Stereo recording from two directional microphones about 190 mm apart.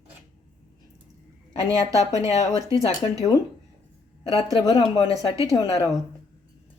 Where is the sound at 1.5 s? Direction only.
30° left (ahead or behind).